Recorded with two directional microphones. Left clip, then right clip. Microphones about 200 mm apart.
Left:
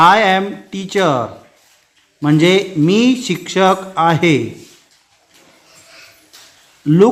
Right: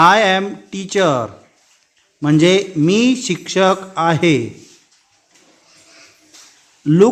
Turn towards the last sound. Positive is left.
turn(degrees=-15)  # may be behind; listen again after turning